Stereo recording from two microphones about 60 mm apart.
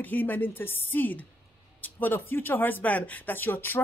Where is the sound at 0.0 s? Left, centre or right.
Left.